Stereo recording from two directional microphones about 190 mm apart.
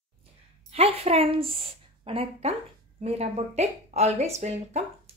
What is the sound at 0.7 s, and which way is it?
A woman's voice, 30° right (ahead or behind).